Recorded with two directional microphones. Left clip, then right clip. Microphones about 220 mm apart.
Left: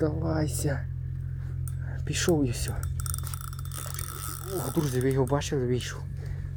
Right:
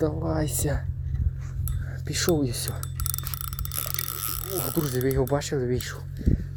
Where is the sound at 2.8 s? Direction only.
25° right (ahead or behind).